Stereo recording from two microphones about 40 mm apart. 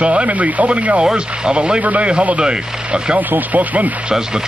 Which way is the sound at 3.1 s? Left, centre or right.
Right.